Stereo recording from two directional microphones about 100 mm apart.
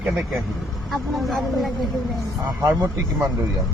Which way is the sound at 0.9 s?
Centre (ahead or behind).